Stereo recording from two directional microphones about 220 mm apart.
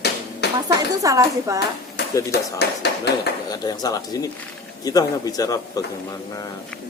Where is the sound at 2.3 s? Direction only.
50° left (ahead or behind).